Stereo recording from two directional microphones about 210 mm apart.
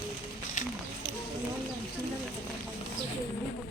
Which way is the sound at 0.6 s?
35° left (ahead or behind).